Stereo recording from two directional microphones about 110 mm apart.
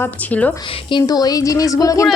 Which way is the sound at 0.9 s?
35° left (ahead or behind).